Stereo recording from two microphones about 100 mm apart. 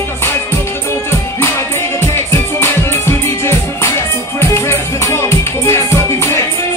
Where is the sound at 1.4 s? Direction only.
25° left (ahead or behind).